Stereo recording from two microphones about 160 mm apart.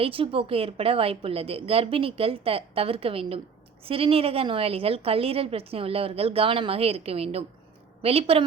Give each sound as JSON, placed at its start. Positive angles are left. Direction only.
{"t": 0.0, "sound": "a woman's voice", "side_deg": -35}